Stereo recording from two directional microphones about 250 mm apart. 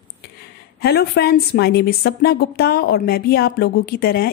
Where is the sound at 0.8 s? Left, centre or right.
Left.